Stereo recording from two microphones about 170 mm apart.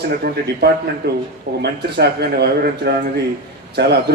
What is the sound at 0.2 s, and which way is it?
A man's voice, 70° right (ahead or behind).